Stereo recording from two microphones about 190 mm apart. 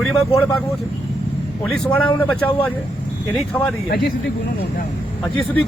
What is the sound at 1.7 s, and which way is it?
Speech, 5° left (ahead or behind).